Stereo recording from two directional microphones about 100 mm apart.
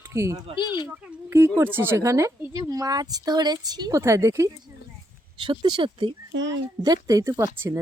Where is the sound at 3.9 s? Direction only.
30° right (ahead or behind).